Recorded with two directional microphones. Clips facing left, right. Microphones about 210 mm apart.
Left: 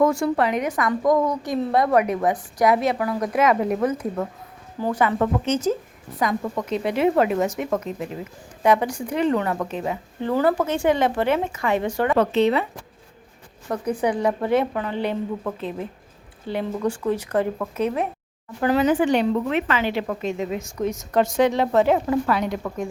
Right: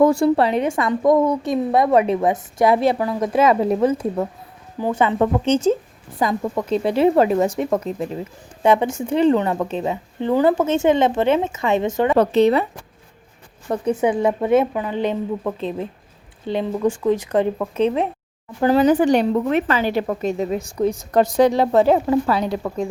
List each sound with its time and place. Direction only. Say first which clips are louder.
0.0 s a woman's voice: right 5 dB; 30° right (ahead or behind)
12.1 s a woman's voice: right 4 dB; 40° right (ahead or behind)
13.7 s a woman's voice: right 4 dB; 25° right (ahead or behind)
17.3 s a woman's voice: right 4 dB; 25° right (ahead or behind)